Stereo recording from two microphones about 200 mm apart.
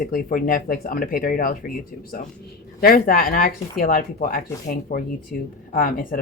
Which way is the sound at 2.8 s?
50° left (ahead or behind).